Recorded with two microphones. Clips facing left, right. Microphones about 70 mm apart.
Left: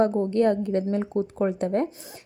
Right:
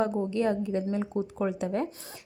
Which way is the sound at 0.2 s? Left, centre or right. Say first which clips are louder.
Left 5 dB; left.